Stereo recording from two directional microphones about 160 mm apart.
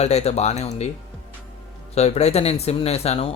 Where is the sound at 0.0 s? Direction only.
40° left (ahead or behind).